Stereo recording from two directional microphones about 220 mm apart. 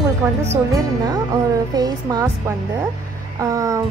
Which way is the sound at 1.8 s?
15° right (ahead or behind).